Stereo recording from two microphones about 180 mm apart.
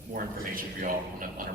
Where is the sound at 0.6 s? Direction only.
50° right (ahead or behind).